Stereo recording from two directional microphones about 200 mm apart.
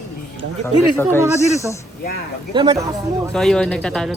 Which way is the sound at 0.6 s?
10° left (ahead or behind).